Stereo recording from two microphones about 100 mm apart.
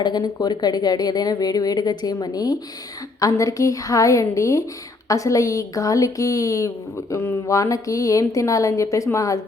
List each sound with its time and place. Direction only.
0.0 s speech: 45° left (ahead or behind)